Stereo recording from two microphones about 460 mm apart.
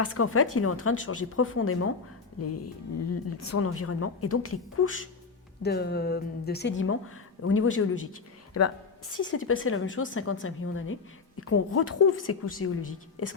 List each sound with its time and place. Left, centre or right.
0.0 s speech: left
2.4 s music: left
3.2 s speech: left
8.6 s music: left
9.1 s speech: left